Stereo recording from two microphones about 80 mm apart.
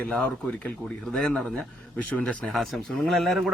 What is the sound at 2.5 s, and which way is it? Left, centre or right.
Speech, centre.